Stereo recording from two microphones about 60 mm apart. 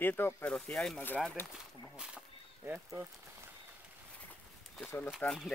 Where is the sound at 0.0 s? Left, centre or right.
Left.